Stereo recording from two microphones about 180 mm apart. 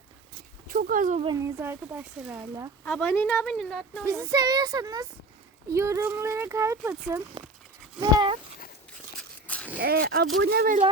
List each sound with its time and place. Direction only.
0.7 s speech: 50° right (ahead or behind)
1.2 s speech: 20° right (ahead or behind)
2.8 s a woman's voice: 5° left (ahead or behind)
4.0 s speech: 20° right (ahead or behind)
7.9 s speech: 25° right (ahead or behind)
9.5 s a sound: 10° left (ahead or behind)
9.8 s speech: 60° right (ahead or behind)